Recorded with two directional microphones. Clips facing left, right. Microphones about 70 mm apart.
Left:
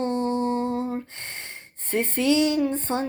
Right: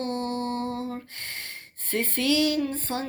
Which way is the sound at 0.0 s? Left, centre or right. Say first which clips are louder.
Left 5 dB; left.